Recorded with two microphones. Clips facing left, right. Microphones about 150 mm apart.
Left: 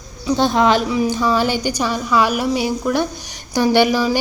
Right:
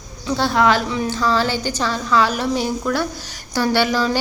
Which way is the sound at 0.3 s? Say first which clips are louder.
Left 2 dB; 20° left (ahead or behind).